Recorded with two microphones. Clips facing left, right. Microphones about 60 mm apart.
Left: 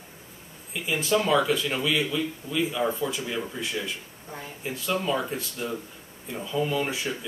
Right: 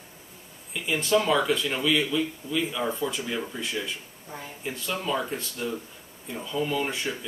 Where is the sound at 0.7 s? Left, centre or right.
Centre.